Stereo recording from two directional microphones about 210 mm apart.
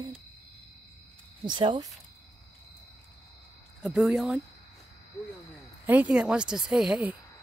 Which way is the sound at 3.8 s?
Centre (ahead or behind).